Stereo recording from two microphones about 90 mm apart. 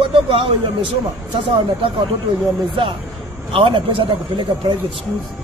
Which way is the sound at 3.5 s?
70° right (ahead or behind).